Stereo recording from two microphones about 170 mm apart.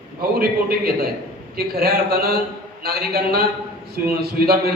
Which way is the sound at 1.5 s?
65° right (ahead or behind).